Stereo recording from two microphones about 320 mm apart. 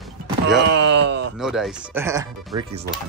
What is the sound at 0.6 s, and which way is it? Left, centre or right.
Speech, right.